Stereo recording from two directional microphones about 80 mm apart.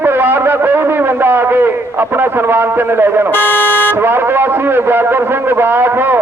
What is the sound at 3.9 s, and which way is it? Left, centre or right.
A man's voice, right.